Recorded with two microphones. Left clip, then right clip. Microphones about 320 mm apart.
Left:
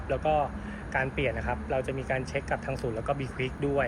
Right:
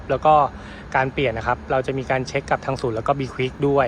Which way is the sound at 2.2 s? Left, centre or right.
Right.